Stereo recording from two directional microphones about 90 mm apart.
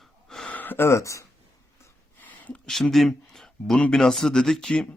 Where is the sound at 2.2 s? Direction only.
15° left (ahead or behind).